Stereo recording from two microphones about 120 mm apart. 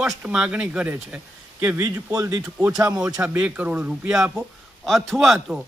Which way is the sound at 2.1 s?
30° right (ahead or behind).